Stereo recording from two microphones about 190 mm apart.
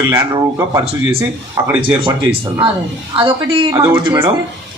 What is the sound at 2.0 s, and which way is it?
A man's voice, 25° right (ahead or behind).